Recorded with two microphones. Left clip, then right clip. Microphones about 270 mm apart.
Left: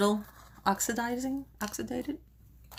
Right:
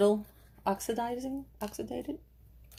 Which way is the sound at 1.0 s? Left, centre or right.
Left.